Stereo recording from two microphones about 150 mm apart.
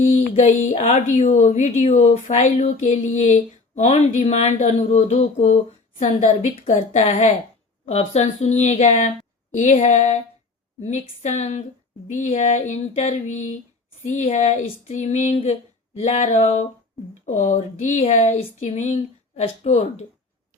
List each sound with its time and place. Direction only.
0.3 s a woman's voice: 50° left (ahead or behind)
17.2 s a woman's voice: 55° left (ahead or behind)